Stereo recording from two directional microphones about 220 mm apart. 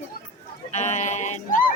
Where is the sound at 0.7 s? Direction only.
30° left (ahead or behind).